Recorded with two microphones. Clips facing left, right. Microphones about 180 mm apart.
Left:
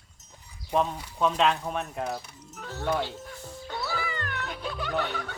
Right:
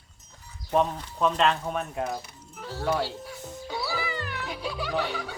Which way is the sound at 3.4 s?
15° right (ahead or behind).